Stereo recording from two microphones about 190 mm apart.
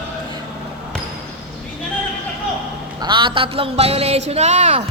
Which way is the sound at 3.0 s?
25° right (ahead or behind).